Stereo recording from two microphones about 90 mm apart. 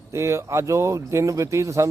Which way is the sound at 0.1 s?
30° right (ahead or behind).